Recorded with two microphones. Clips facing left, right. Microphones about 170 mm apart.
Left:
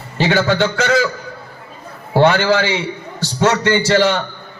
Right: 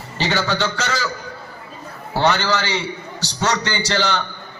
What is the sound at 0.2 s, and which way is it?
Speech, 50° left (ahead or behind).